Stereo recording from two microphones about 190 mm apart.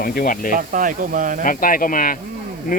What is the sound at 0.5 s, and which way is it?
Speech, 45° right (ahead or behind).